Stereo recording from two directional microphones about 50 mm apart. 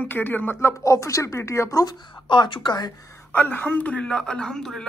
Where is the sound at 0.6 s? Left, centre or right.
Left.